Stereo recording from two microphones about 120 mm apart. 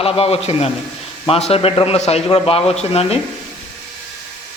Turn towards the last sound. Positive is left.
turn(degrees=60)  # may be behind; listen again after turning